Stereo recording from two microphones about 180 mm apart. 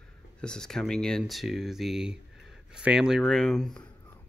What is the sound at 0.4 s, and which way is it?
Speech, 5° left (ahead or behind).